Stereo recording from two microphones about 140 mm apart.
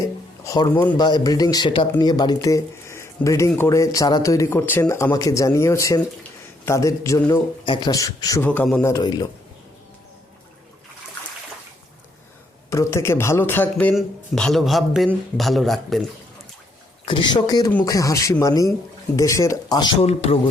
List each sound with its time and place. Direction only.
0.4 s a sound: 25° left (ahead or behind)
0.7 s speech: 15° left (ahead or behind)
0.9 s speech: 30° left (ahead or behind)
7.6 s speech: 35° left (ahead or behind)
8.4 s speech: 15° left (ahead or behind)
8.8 s speech: 25° left (ahead or behind)
12.7 s speech: 20° left (ahead or behind); by 16.0 s centre (ahead or behind)
17.1 s speech: 35° left (ahead or behind)
20.0 s speech: 45° left (ahead or behind)